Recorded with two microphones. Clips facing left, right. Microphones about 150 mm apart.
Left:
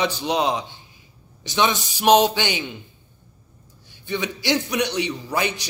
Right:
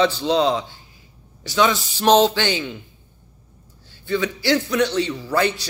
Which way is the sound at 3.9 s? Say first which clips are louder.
Right 4 dB; 20° left (ahead or behind).